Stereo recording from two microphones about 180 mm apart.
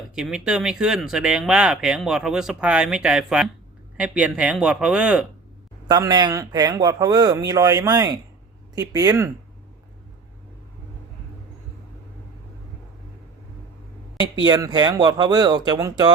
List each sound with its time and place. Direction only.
0.2 s speech: 5° right (ahead or behind)
5.9 s speech: 20° right (ahead or behind)
14.4 s speech: 25° right (ahead or behind)